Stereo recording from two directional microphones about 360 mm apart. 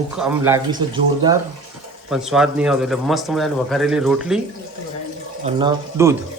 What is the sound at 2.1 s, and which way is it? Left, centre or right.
Speech, centre.